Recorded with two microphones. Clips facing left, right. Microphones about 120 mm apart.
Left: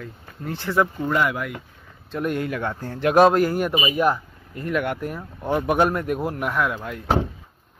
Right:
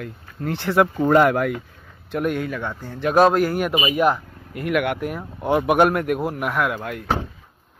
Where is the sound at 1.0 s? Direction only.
50° right (ahead or behind).